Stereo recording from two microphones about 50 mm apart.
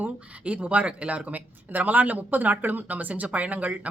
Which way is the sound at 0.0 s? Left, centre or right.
Right.